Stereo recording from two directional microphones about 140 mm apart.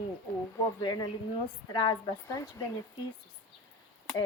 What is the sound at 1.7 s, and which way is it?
Speech, 35° left (ahead or behind).